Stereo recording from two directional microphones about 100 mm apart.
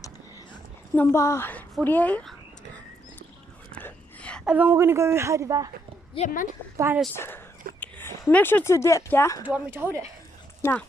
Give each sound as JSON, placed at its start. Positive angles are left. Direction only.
{"t": 0.9, "sound": "a woman's voice", "side_deg": 25}
{"t": 1.5, "sound": "a woman's voice", "side_deg": 15}
{"t": 3.7, "sound": "a sound", "side_deg": 15}
{"t": 4.5, "sound": "a woman's voice", "side_deg": -15}
{"t": 4.7, "sound": "a man's voice", "side_deg": -25}
{"t": 6.2, "sound": "a woman's voice", "side_deg": 90}
{"t": 7.2, "sound": "speech", "side_deg": 20}
{"t": 9.5, "sound": "a man's voice", "side_deg": -20}
{"t": 10.6, "sound": "speech", "side_deg": 15}